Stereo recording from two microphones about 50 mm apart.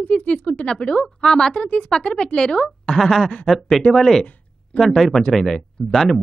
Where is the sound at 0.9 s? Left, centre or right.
Centre.